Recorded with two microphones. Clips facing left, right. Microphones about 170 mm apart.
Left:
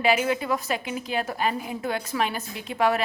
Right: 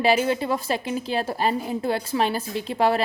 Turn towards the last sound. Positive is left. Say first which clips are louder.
# right 2 dB
turn(degrees=-30)  # may be behind; listen again after turning